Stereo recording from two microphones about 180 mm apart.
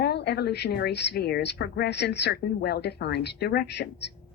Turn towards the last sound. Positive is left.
turn(degrees=65)  # may be behind; listen again after turning